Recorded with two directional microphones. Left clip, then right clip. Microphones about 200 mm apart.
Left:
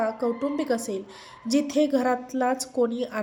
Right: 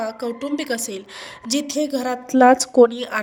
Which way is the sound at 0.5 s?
55° right (ahead or behind).